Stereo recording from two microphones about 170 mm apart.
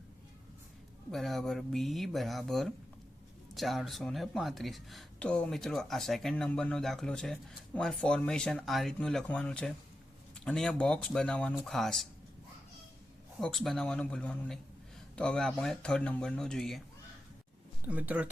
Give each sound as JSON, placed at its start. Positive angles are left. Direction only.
{"t": 1.1, "sound": "speech", "side_deg": 0}
{"t": 13.4, "sound": "speech", "side_deg": 0}
{"t": 17.8, "sound": "speech", "side_deg": -10}